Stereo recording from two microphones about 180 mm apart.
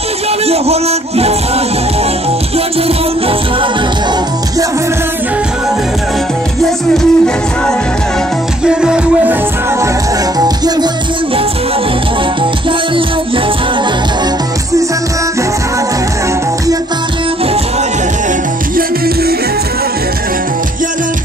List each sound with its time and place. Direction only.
0.5 s speech: 35° right (ahead or behind)
6.6 s music: centre (ahead or behind)
8.6 s music: 5° right (ahead or behind)